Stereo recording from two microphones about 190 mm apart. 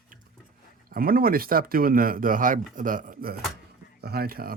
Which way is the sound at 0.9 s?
50° right (ahead or behind).